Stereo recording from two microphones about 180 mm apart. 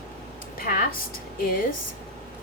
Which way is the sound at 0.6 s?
55° left (ahead or behind).